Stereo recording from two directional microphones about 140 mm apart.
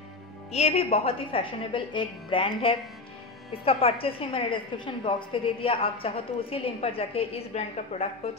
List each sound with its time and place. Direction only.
0.5 s a woman's voice: 50° left (ahead or behind)